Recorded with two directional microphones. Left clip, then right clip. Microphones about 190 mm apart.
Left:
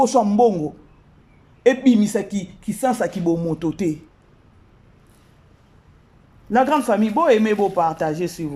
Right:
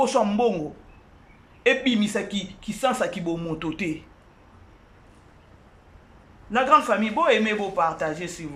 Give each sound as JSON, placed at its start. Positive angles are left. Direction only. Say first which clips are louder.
{"t": 0.0, "sound": "speech", "louder": "left 5 dB", "side_deg": 35}
{"t": 1.6, "sound": "speech", "louder": "left 5 dB", "side_deg": 35}
{"t": 6.5, "sound": "speech", "louder": "left 1 dB", "side_deg": 40}